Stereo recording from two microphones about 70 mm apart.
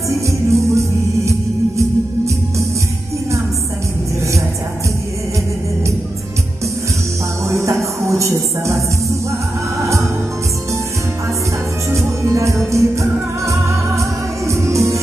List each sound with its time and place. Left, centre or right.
0.5 s music: right
7.6 s music: right
11.9 s music: right